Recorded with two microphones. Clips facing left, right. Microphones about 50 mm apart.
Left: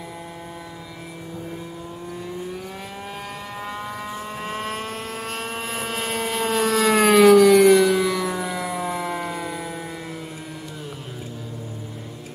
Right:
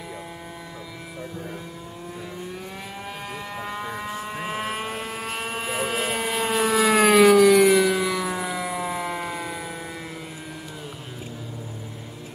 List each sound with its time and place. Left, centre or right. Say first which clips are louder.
3.5 s vehicle: even; centre